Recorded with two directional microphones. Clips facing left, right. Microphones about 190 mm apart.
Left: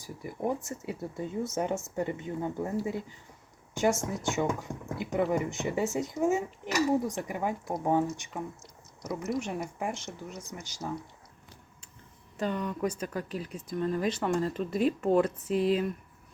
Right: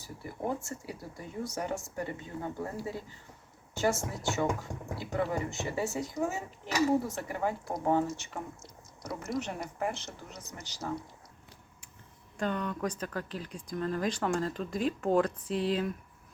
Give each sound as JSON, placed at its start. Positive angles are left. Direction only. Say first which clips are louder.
{"t": 0.6, "sound": "speech", "louder": "left 5 dB", "side_deg": 25}
{"t": 9.0, "sound": "speech", "louder": "left 3 dB", "side_deg": 5}
{"t": 12.4, "sound": "speech", "louder": "left 2 dB", "side_deg": 5}